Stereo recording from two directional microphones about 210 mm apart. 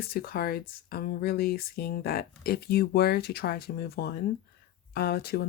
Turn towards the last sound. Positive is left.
turn(degrees=50)  # may be behind; listen again after turning